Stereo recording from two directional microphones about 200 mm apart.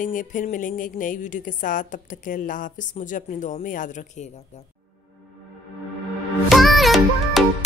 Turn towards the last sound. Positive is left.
turn(degrees=0)  # may be behind; listen again after turning